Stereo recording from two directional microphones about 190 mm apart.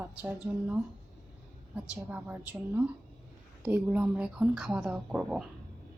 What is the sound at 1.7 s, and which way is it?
A woman's voice, 10° right (ahead or behind).